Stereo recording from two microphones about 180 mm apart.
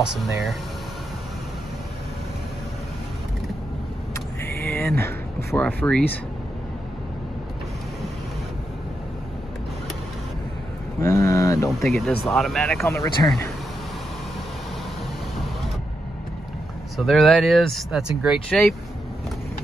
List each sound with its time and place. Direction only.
0.0 s speech: centre (ahead or behind)
4.1 s a sound: 15° left (ahead or behind)
11.0 s speech: 15° left (ahead or behind)
11.8 s speech: centre (ahead or behind)
12.8 s speech: 15° left (ahead or behind)
16.9 s speech: centre (ahead or behind)